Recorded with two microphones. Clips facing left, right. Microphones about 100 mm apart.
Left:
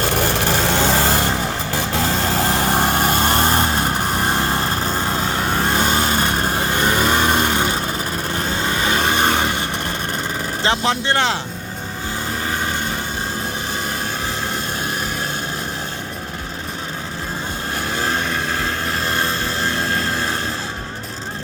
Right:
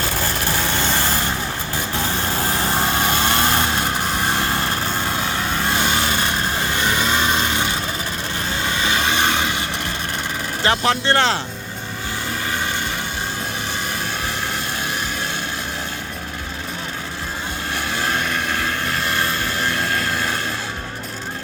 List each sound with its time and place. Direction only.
0.1 s a sound: 75° left (ahead or behind); by 0.8 s 90° left
0.9 s vehicle: 90° left
2.8 s vehicle: 45° left (ahead or behind)
5.5 s vehicle: 40° left (ahead or behind)
8.6 s rub: 40° left (ahead or behind)
10.6 s speech: 20° left (ahead or behind)
17.9 s vehicle: 30° left (ahead or behind)